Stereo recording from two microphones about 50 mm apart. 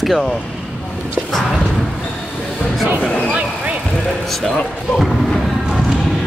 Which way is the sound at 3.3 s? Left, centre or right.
Right.